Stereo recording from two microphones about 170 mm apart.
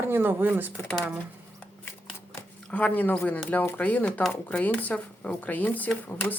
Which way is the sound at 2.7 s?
10° left (ahead or behind).